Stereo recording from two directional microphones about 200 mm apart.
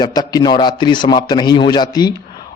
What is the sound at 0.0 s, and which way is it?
A man's voice, 20° left (ahead or behind).